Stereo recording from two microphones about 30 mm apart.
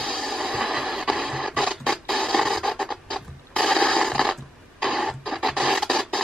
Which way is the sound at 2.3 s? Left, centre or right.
Centre.